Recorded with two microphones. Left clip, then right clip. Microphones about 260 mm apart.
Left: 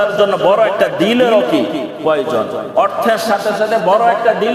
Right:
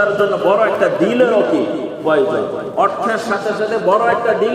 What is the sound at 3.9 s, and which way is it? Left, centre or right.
Speech, left.